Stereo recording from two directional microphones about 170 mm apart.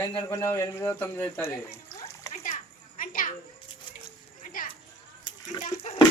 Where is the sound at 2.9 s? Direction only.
55° left (ahead or behind).